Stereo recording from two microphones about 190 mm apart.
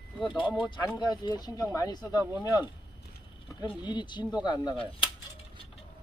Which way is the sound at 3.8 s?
25° left (ahead or behind).